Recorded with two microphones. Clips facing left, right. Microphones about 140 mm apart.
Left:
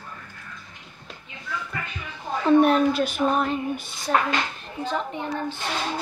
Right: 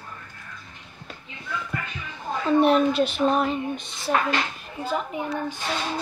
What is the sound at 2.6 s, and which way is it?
Speech, 40° left (ahead or behind).